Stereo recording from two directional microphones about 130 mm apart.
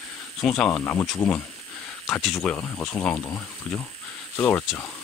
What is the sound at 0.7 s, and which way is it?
Speech, 15° left (ahead or behind).